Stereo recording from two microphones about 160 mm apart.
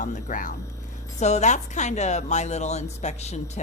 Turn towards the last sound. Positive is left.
turn(degrees=45)  # may be behind; listen again after turning